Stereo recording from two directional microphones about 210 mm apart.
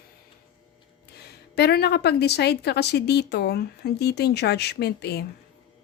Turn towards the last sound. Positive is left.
turn(degrees=50)  # may be behind; listen again after turning